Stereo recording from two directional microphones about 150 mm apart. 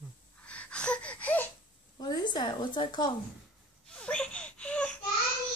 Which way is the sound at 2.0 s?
25° left (ahead or behind).